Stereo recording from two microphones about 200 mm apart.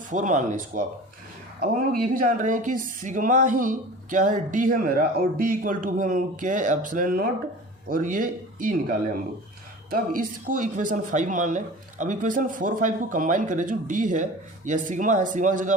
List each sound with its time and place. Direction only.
0.1 s speech: 40° right (ahead or behind)
1.9 s speech: 45° right (ahead or behind)